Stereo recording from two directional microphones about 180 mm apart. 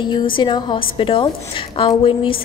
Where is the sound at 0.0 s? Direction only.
25° left (ahead or behind).